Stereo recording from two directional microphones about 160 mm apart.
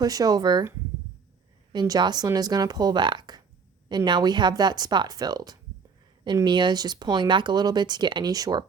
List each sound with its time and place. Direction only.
0.0 s speech: 25° right (ahead or behind)
1.7 s speech: 25° right (ahead or behind)